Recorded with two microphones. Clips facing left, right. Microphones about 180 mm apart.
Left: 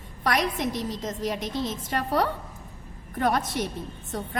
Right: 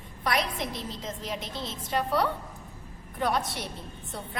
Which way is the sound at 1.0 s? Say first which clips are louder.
Left 6 dB; 45° left (ahead or behind).